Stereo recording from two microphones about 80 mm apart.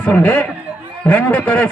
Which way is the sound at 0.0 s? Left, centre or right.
Centre.